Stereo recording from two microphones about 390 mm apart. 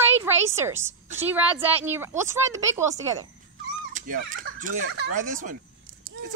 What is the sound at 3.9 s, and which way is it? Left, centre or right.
Speech, right.